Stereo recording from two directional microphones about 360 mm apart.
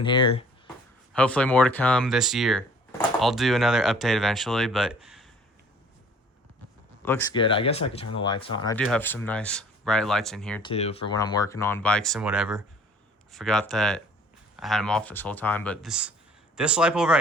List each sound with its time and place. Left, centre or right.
0.0 s speech: centre
1.1 s speech: centre
7.0 s speech: centre
10.7 s speech: centre